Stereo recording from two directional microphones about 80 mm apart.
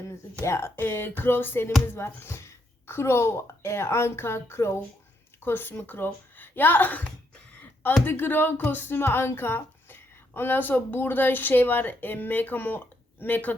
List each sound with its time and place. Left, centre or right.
0.4 s a woman's voice: left